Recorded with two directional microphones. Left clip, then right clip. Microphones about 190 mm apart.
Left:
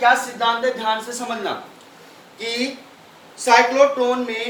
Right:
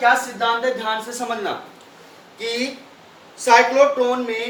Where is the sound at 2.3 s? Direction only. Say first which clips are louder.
Even; centre (ahead or behind).